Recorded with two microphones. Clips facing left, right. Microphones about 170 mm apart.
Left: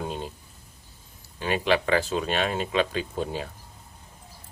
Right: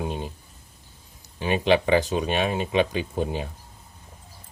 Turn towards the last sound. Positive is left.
turn(degrees=-20)  # may be behind; listen again after turning